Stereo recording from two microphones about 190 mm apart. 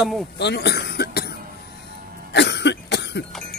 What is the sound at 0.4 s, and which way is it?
Cough, 65° left (ahead or behind).